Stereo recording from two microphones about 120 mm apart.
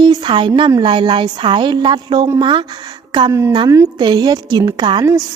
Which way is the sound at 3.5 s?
35° right (ahead or behind).